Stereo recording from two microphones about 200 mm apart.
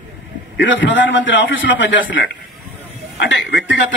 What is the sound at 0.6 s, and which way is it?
A man's voice, 70° left (ahead or behind).